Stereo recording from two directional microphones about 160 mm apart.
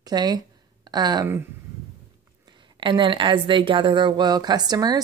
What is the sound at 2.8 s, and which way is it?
Speech, 30° right (ahead or behind).